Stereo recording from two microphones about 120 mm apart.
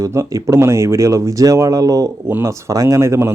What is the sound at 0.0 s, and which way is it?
A man's voice, 25° right (ahead or behind).